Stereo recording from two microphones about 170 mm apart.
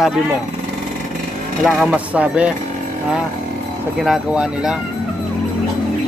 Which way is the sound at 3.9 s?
Centre (ahead or behind).